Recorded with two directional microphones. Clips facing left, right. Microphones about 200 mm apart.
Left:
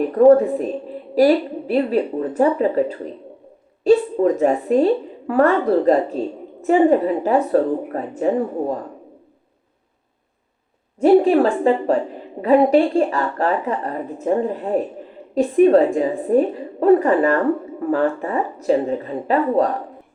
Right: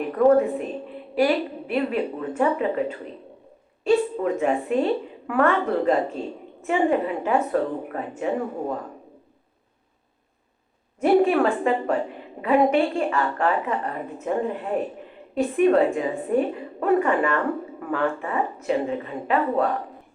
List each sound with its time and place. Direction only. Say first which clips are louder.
0.1 s a woman's voice: left 5 dB; 35° left (ahead or behind)
11.0 s a woman's voice: left 5 dB; 35° left (ahead or behind)